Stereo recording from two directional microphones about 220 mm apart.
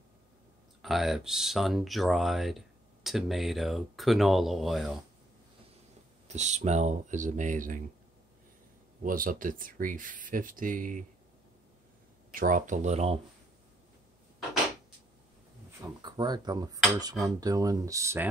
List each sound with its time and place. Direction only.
0.8 s speech: centre (ahead or behind)
6.2 s speech: 30° right (ahead or behind)
9.0 s speech: 40° right (ahead or behind)
12.3 s speech: 35° right (ahead or behind)
15.8 s speech: 20° right (ahead or behind)